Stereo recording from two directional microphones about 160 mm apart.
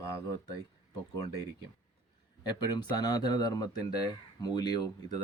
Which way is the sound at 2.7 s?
25° left (ahead or behind).